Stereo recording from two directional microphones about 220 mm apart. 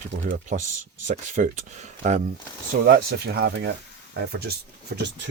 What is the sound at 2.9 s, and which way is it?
Speech, 45° right (ahead or behind).